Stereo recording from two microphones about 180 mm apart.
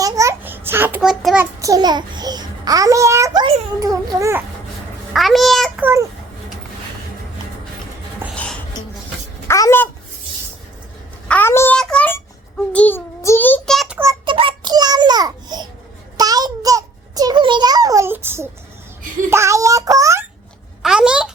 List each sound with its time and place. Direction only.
0.0 s babbling: 15° right (ahead or behind)
1.5 s a child's voice: 20° right (ahead or behind)
3.8 s babbling: 20° right (ahead or behind)
5.1 s a child's voice: centre (ahead or behind)
5.8 s babbling: 15° right (ahead or behind)
8.2 s dishes: 10° right (ahead or behind)
9.5 s speech: 15° left (ahead or behind)
11.3 s child singing: 10° left (ahead or behind); by 14.1 s 5° right (ahead or behind)
14.1 s child singing: 30° right (ahead or behind)
16.1 s a sound: 20° right (ahead or behind)
20.8 s a sound: 5° right (ahead or behind)